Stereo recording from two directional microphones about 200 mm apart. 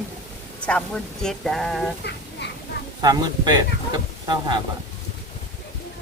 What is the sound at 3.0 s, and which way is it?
Speech, 20° right (ahead or behind).